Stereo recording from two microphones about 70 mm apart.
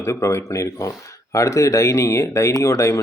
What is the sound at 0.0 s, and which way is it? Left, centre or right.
Speech, left.